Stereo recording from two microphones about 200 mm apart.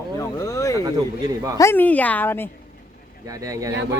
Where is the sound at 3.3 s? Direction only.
15° right (ahead or behind).